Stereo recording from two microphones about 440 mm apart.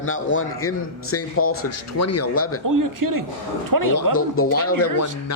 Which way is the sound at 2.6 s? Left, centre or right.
Right.